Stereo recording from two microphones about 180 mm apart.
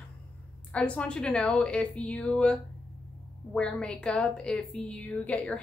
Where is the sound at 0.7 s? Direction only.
5° left (ahead or behind).